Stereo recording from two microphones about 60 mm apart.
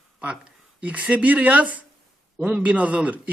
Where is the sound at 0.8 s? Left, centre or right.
Right.